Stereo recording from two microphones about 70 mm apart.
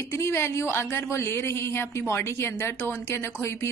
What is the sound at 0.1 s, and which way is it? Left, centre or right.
Speech, left.